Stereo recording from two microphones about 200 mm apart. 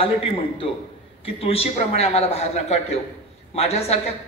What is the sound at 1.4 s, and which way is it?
A woman's voice, 30° left (ahead or behind).